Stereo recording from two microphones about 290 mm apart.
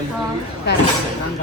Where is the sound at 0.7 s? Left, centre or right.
Left.